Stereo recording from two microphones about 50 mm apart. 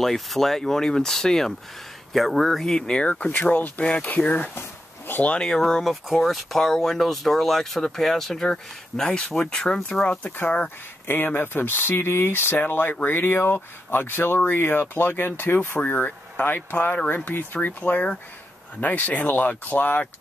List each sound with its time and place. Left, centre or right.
0.0 s speech: centre
2.9 s speech: left
4.6 s a sound: left
5.4 s speech: centre
11.1 s speech: left
15.8 s speech: left